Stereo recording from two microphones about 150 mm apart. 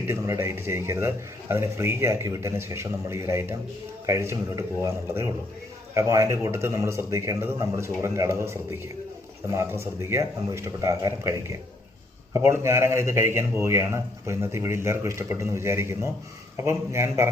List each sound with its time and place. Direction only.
0.1 s a man's voice: 20° right (ahead or behind)